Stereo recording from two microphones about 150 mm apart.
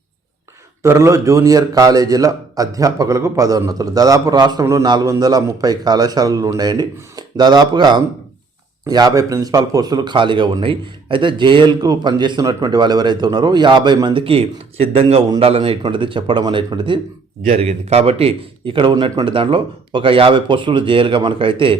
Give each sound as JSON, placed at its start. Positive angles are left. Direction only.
{"t": 0.8, "sound": "a man's voice", "side_deg": -20}
{"t": 17.5, "sound": "a man's voice", "side_deg": -45}